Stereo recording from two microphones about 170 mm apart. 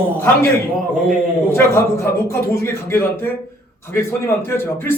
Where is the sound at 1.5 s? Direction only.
15° left (ahead or behind).